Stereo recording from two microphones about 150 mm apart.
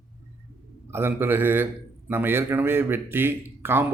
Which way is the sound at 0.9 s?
15° right (ahead or behind).